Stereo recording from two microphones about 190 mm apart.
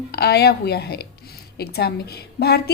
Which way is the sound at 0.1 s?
55° left (ahead or behind).